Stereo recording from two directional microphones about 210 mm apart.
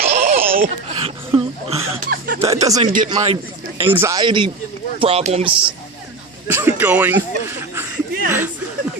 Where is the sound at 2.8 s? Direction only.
35° right (ahead or behind).